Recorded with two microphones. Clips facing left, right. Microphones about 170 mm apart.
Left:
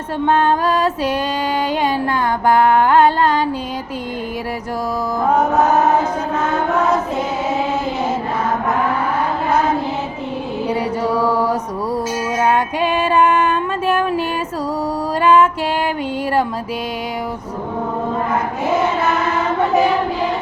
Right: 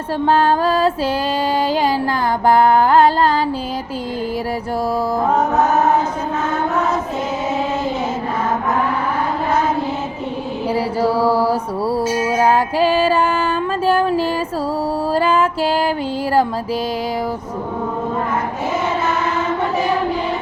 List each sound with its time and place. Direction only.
0.3 s mantra: 35° right (ahead or behind)
2.5 s mantra: 30° right (ahead or behind)
10.7 s mantra: 30° right (ahead or behind)
12.4 s female singing: 35° right (ahead or behind)
15.1 s music: 30° right (ahead or behind)